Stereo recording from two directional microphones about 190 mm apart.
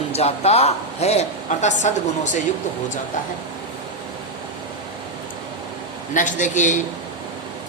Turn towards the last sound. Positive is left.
turn(degrees=40)  # may be behind; listen again after turning